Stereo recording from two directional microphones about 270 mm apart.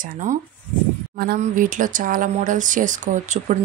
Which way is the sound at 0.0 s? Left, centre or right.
Right.